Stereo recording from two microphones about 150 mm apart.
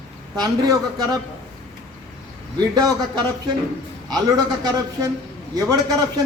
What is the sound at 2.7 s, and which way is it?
A man's voice, 25° right (ahead or behind).